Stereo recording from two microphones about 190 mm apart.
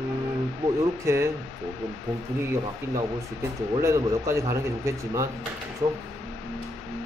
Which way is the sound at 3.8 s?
15° right (ahead or behind).